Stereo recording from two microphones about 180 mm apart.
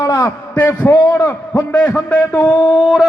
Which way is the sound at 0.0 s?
20° left (ahead or behind).